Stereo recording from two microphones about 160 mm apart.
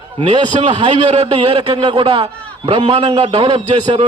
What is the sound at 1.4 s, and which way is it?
A man's voice, 25° right (ahead or behind).